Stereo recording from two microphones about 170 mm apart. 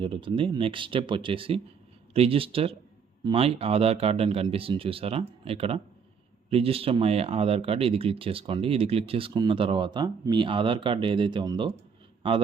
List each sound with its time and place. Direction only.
0.0 s speech: 30° right (ahead or behind)